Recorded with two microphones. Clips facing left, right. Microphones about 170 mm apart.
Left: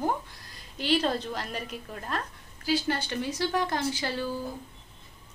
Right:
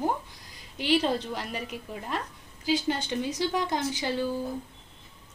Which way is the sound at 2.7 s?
20° right (ahead or behind).